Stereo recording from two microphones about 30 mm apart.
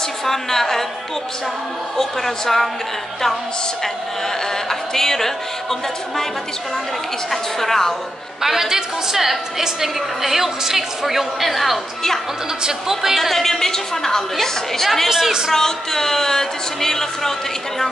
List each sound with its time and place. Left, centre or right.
0.2 s speech: centre
2.0 s speech: centre
4.6 s speech: centre
7.2 s speech: centre
8.4 s a woman's voice: centre
9.1 s a woman's voice: centre
12.9 s speech: centre
15.0 s a woman's voice: centre
15.5 s speech: centre